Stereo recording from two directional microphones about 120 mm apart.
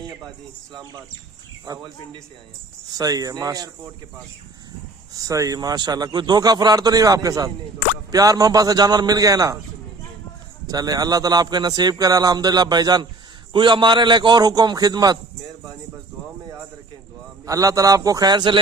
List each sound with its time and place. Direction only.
1.6 s a man's voice: 30° right (ahead or behind)
5.1 s a man's voice: 30° right (ahead or behind)
10.7 s a man's voice: 30° right (ahead or behind)
17.4 s a man's voice: 30° right (ahead or behind)